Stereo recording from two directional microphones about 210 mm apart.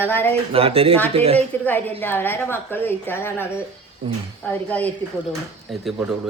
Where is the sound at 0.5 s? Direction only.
25° right (ahead or behind).